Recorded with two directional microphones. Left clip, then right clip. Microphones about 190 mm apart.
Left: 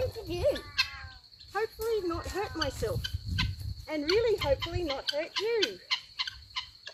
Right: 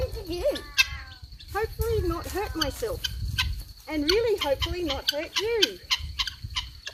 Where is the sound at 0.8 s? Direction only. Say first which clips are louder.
Right 10 dB; 60° right (ahead or behind).